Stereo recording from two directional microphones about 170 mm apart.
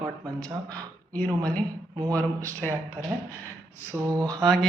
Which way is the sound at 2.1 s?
10° left (ahead or behind).